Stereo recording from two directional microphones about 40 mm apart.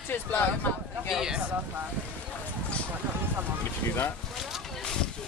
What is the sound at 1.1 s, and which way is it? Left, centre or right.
Speech, centre.